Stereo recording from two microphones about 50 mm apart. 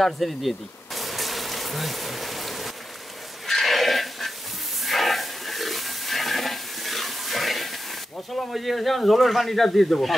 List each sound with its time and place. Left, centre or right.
0.0 s bee: centre
3.4 s pig: centre
4.8 s a sound: centre
8.4 s speech: centre